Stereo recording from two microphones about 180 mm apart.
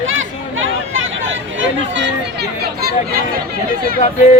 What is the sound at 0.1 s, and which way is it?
Chatter, 90° right.